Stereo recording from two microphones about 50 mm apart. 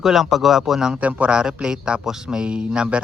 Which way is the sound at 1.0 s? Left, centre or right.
Right.